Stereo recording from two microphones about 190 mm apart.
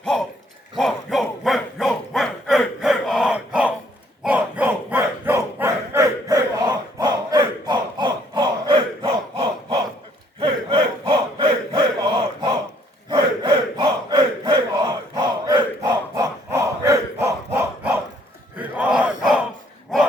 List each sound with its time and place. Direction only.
0.0 s dog: 5° left (ahead or behind)
0.8 s a sound: centre (ahead or behind)
4.2 s dog: 5° right (ahead or behind); by 9.8 s 25° right (ahead or behind)
10.4 s battle cry: 25° right (ahead or behind); by 19.5 s 5° right (ahead or behind)